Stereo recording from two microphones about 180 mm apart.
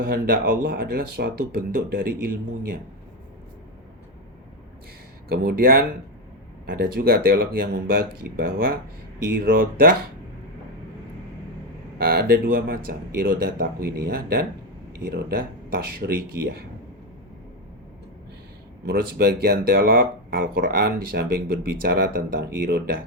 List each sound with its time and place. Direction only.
0.0 s speech: 55° right (ahead or behind)
5.3 s speech: 55° right (ahead or behind)
9.3 s speech: 60° right (ahead or behind)
11.9 s speech: 55° right (ahead or behind)
18.9 s speech: 60° right (ahead or behind)